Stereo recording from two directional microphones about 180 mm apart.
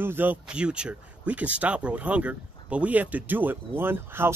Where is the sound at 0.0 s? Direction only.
10° right (ahead or behind).